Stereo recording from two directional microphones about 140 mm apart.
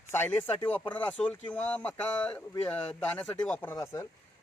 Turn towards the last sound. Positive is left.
turn(degrees=20)  # may be behind; listen again after turning